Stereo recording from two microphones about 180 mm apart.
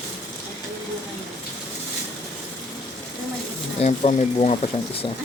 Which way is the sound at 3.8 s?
35° left (ahead or behind).